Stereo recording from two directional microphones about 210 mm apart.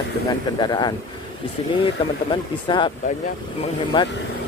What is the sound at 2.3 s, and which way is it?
Speech, 20° left (ahead or behind).